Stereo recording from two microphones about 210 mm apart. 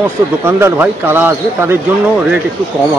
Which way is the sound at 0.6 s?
10° right (ahead or behind).